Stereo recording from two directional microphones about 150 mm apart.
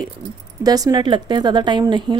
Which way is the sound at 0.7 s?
25° right (ahead or behind).